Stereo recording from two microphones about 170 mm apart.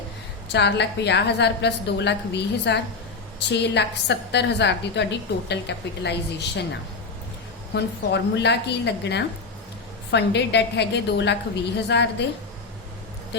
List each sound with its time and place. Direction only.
0.5 s a woman's voice: 90° left
7.7 s a woman's voice: 85° left